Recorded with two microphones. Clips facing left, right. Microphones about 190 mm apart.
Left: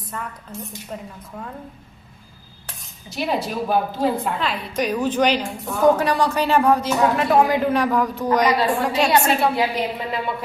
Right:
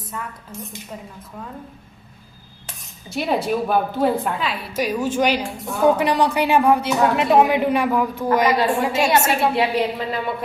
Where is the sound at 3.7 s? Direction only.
55° right (ahead or behind).